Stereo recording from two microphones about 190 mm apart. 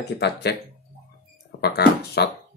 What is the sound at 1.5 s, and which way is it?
Beatboxing, 60° left (ahead or behind).